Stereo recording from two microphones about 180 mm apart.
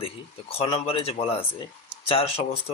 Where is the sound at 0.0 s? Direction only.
35° left (ahead or behind).